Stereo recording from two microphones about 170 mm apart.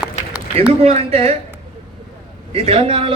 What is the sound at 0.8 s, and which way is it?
Speech, 35° right (ahead or behind).